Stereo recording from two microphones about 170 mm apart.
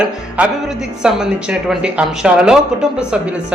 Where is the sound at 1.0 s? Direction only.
5° right (ahead or behind).